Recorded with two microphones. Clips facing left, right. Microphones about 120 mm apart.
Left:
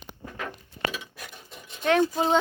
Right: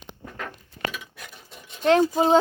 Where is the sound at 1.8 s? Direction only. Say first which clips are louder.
Right 4 dB; 30° right (ahead or behind).